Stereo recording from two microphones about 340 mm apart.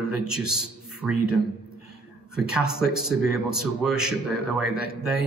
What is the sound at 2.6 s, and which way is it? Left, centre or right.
Speech, left.